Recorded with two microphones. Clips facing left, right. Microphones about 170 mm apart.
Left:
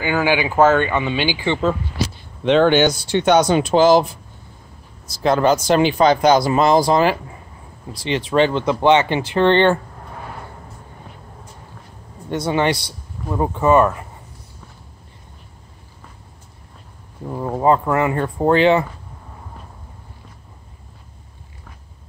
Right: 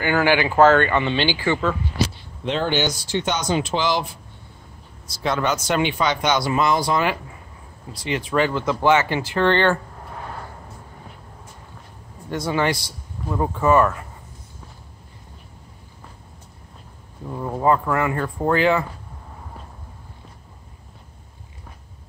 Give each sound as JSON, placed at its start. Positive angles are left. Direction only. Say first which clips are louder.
{"t": 0.0, "sound": "speech", "louder": "even", "side_deg": 15}
{"t": 2.4, "sound": "speech", "louder": "left 8 dB", "side_deg": 70}
{"t": 5.2, "sound": "speech", "louder": "left 7 dB", "side_deg": 35}
{"t": 8.3, "sound": "speech", "louder": "left 5 dB", "side_deg": 25}
{"t": 12.4, "sound": "speech", "louder": "left 3 dB", "side_deg": 20}
{"t": 17.3, "sound": "speech", "louder": "left 3 dB", "side_deg": 25}